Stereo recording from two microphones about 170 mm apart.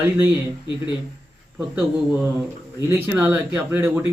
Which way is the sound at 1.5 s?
5° right (ahead or behind).